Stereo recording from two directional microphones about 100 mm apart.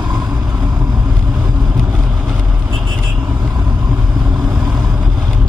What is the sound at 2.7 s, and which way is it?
Vehicle, 45° right (ahead or behind).